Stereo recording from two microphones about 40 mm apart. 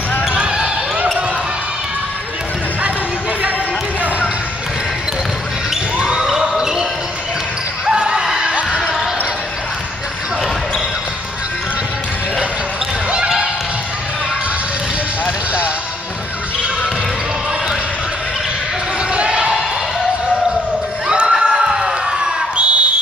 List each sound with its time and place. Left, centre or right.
0.3 s basketball bounce: right
5.9 s basketball bounce: right
8.7 s basketball bounce: centre
19.1 s crowd: right
21.1 s a sound: right